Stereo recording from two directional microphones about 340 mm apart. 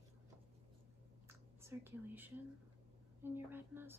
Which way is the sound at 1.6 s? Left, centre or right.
Centre.